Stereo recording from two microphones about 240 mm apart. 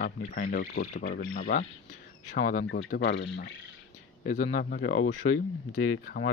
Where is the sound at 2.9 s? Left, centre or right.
Left.